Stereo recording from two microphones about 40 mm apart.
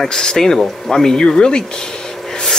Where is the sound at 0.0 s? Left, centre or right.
Centre.